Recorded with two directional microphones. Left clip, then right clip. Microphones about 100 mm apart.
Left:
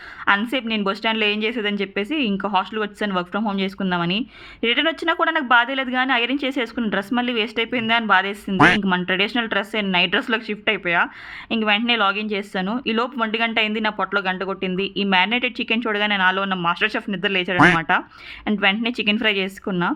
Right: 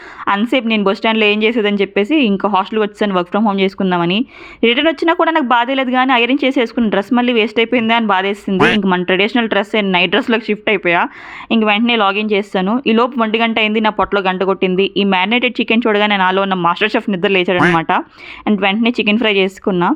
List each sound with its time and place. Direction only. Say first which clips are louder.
0.3 s a woman's voice: right 5 dB; 40° right (ahead or behind)
8.5 s speech: right 2 dB; centre (ahead or behind)
8.8 s speech: right 6 dB; 25° right (ahead or behind)
9.0 s a woman's voice: right 7 dB; 40° right (ahead or behind)